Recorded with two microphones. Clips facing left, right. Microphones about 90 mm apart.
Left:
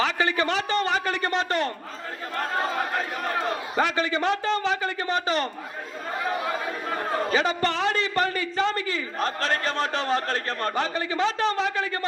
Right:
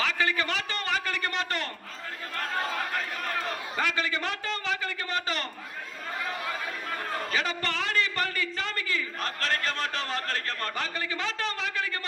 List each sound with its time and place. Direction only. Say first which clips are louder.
0.0 s a man's voice: left 4 dB; 25° left (ahead or behind)